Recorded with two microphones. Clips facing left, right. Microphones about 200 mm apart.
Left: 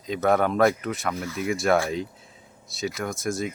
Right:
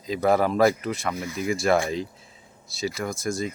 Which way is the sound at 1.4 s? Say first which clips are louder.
Even; centre (ahead or behind).